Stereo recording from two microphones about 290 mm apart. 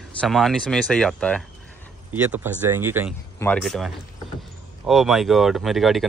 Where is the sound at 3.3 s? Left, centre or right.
Centre.